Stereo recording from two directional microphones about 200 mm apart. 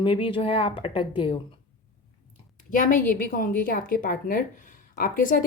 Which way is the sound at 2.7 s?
40° left (ahead or behind).